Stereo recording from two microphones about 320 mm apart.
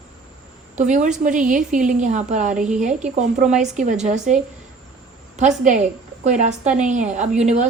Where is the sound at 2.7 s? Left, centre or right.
Right.